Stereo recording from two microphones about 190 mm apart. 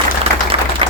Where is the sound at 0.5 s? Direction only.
30° right (ahead or behind).